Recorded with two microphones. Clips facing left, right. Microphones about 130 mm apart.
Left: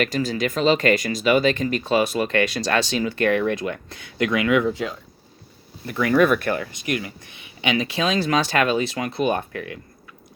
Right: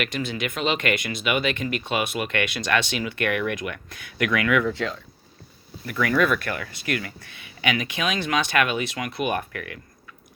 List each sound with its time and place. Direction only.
0.0 s speech: 35° left (ahead or behind)
4.7 s speech: 10° left (ahead or behind)
5.8 s speech: 30° left (ahead or behind)